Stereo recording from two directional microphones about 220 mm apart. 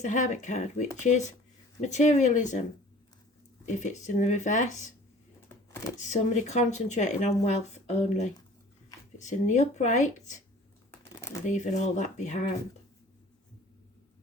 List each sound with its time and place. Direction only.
0.0 s speech: 35° left (ahead or behind)
3.8 s speech: 35° left (ahead or behind)
6.0 s speech: 35° left (ahead or behind)
11.1 s a sound: 10° left (ahead or behind)
11.4 s speech: 35° left (ahead or behind)